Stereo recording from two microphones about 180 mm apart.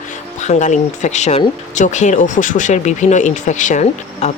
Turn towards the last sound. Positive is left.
turn(degrees=40)  # may be behind; listen again after turning